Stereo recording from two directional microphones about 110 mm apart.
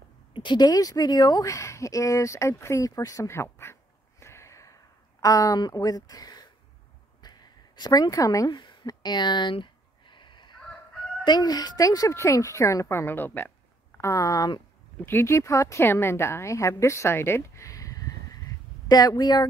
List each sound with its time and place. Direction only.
0.3 s a woman's voice: 45° left (ahead or behind); by 3.7 s 25° left (ahead or behind)
4.2 s a sound: 25° left (ahead or behind)
5.2 s speech: 30° left (ahead or behind)
7.2 s a sound: 40° left (ahead or behind)
11.2 s a woman's voice: 40° left (ahead or behind); by 13.5 s 15° left (ahead or behind)
13.9 s a woman's voice: 25° left (ahead or behind)